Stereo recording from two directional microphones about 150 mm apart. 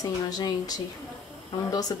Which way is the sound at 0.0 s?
25° left (ahead or behind).